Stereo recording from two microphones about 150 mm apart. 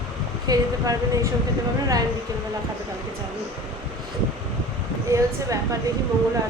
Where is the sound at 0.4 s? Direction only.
25° right (ahead or behind).